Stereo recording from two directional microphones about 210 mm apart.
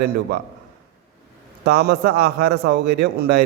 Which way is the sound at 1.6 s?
50° right (ahead or behind).